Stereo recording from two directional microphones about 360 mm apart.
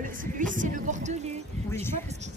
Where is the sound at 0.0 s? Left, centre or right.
Right.